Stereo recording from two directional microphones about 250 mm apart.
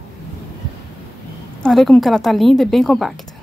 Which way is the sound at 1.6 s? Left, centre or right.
Centre.